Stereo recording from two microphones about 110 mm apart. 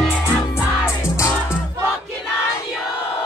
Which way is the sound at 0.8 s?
25° left (ahead or behind).